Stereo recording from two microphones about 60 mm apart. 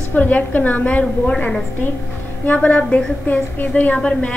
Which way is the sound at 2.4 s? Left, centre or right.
Left.